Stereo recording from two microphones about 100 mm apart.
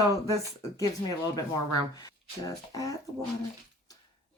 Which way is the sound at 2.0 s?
35° left (ahead or behind).